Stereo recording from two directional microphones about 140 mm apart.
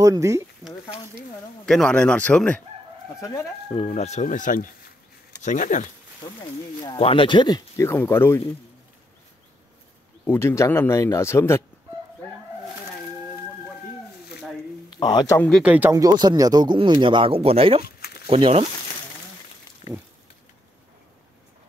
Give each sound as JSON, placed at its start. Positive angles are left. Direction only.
{"t": 0.0, "sound": "speech", "side_deg": -25}
{"t": 1.7, "sound": "speech", "side_deg": 5}
{"t": 3.2, "sound": "speech", "side_deg": 20}
{"t": 3.6, "sound": "speech", "side_deg": 40}
{"t": 5.4, "sound": "speech", "side_deg": 65}
{"t": 6.8, "sound": "speech", "side_deg": 40}
{"t": 10.2, "sound": "speech", "side_deg": 15}
{"t": 15.0, "sound": "speech", "side_deg": 30}
{"t": 15.3, "sound": "speech", "side_deg": 10}
{"t": 15.6, "sound": "speech", "side_deg": -10}
{"t": 15.9, "sound": "speech", "side_deg": -25}
{"t": 19.8, "sound": "a sound", "side_deg": 45}